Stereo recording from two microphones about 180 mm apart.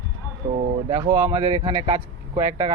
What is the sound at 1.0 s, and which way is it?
Speech, 20° right (ahead or behind).